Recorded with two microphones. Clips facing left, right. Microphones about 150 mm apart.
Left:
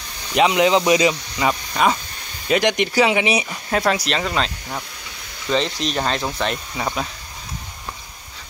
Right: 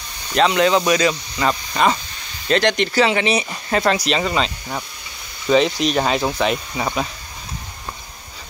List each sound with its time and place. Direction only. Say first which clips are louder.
0.3 s speech: even; 15° left (ahead or behind); by 7.1 s 5° right (ahead or behind)